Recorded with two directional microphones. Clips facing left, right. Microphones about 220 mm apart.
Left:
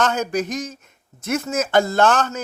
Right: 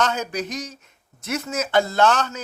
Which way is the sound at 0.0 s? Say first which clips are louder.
Left 3 dB; 50° left (ahead or behind).